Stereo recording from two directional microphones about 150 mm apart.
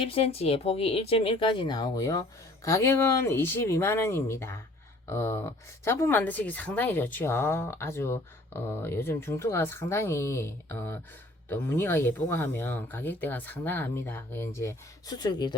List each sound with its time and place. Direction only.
0.0 s speech: 40° left (ahead or behind)